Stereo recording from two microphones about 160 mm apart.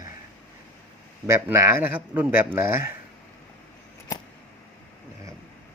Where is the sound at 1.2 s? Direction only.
15° right (ahead or behind).